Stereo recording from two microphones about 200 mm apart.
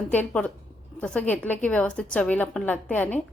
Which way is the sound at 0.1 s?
5° left (ahead or behind).